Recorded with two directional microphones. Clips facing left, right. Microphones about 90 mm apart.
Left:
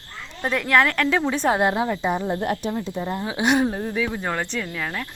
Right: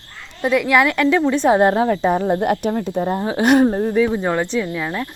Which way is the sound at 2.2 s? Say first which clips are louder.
Right 6 dB; 55° right (ahead or behind).